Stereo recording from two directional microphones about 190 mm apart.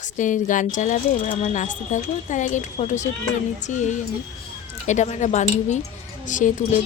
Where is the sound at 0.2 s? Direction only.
40° left (ahead or behind).